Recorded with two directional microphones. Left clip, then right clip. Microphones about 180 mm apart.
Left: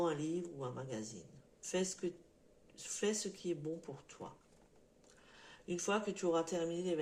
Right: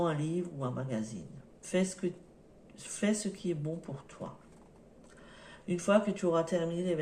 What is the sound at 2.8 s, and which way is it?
Speech, 35° left (ahead or behind).